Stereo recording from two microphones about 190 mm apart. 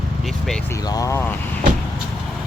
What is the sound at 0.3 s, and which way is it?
Vehicle, centre (ahead or behind).